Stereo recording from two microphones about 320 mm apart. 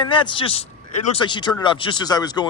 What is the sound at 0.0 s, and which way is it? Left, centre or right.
Speech, centre.